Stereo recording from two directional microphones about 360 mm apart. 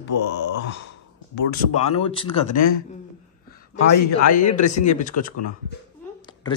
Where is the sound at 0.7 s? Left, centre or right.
Left.